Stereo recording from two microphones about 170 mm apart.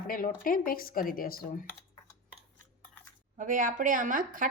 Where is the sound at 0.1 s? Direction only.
55° left (ahead or behind).